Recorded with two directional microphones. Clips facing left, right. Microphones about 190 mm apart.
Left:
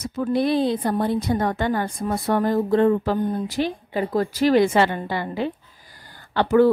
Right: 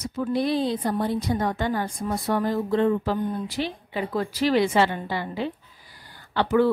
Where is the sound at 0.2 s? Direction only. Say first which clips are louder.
Left 3 dB; 55° left (ahead or behind).